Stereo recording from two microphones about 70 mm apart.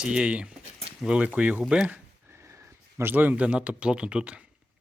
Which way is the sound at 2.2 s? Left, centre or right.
Right.